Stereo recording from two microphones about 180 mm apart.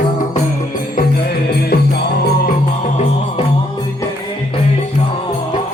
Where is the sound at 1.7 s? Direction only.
65° left (ahead or behind).